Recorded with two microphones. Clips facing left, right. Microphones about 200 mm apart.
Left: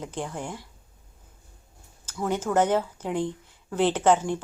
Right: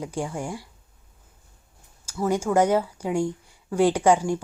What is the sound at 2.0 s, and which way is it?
A woman's voice, 10° right (ahead or behind).